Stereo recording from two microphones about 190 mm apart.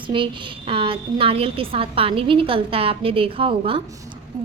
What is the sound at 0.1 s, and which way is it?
A woman's voice, 25° right (ahead or behind).